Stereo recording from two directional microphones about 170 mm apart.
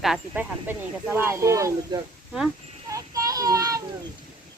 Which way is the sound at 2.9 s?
20° right (ahead or behind).